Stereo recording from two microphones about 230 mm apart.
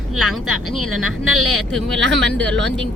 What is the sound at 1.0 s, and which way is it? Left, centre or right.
Speech, right.